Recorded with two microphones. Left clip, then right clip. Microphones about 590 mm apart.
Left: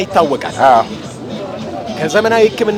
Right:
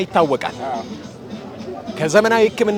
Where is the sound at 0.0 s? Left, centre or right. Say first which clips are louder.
Left 4 dB; right.